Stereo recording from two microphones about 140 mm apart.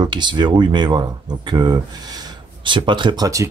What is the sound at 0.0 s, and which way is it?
Speech, 30° right (ahead or behind).